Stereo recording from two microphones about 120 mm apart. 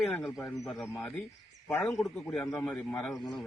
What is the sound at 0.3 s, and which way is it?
Speech, centre (ahead or behind).